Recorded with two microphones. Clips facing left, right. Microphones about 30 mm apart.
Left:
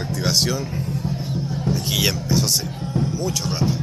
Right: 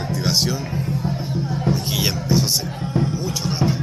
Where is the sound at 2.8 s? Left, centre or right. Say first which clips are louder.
Right 1 dB; right.